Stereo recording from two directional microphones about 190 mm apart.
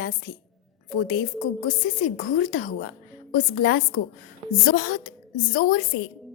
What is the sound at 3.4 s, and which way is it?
A woman's voice, 45° left (ahead or behind).